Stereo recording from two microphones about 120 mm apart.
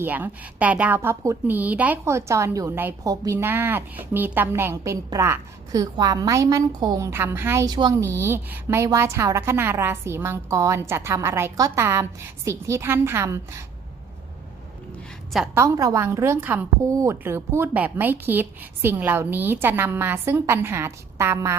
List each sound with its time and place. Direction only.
0.0 s a woman's voice: 15° right (ahead or behind); by 3.3 s 30° right (ahead or behind)
3.3 s a woman's voice: 20° right (ahead or behind); by 7.1 s 35° right (ahead or behind)
7.1 s a woman's voice: 20° right (ahead or behind)
7.7 s speech: 35° right (ahead or behind)
8.1 s a woman's voice: 20° right (ahead or behind)
15.5 s a woman's voice: 25° right (ahead or behind)
16.8 s a woman's voice: 25° right (ahead or behind)